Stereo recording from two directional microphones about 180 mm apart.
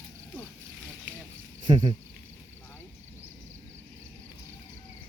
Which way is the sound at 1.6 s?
25° right (ahead or behind).